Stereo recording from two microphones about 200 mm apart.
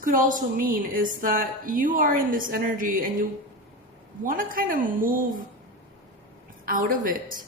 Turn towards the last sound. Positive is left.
turn(degrees=-45)  # may be behind; listen again after turning